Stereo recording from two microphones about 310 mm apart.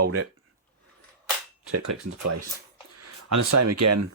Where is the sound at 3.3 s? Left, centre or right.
Right.